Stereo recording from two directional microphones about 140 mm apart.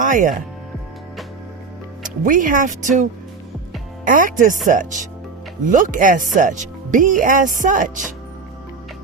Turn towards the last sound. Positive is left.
turn(degrees=-65)  # may be behind; listen again after turning